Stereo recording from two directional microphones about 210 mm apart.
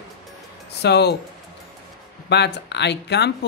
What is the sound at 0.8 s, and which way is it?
Speech, 50° left (ahead or behind).